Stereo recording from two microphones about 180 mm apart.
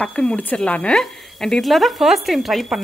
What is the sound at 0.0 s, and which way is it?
Speech, 5° left (ahead or behind).